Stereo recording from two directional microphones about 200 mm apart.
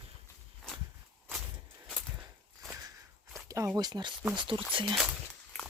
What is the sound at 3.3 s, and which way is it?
Speech, 15° right (ahead or behind).